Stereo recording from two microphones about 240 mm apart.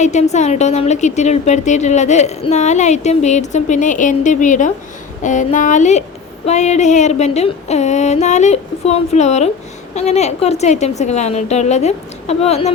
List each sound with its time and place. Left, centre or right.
0.0 s a woman's voice: left